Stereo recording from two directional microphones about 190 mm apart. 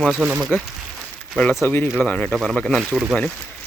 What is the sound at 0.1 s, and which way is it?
Speech, 10° right (ahead or behind).